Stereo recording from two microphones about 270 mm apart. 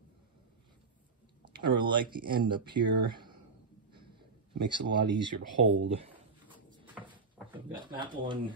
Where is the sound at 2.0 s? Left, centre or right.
Centre.